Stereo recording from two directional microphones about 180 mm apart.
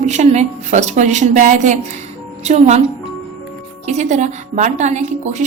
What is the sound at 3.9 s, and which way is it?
Speech, 40° right (ahead or behind).